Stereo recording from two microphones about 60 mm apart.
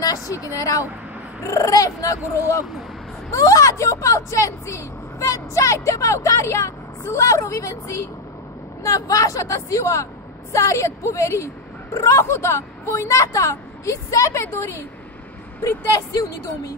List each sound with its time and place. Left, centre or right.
0.0 s speech: left